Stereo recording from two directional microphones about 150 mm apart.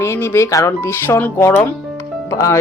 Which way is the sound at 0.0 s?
15° left (ahead or behind).